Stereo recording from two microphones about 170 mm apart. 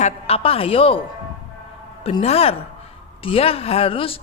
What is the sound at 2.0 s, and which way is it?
A woman's voice, 35° left (ahead or behind).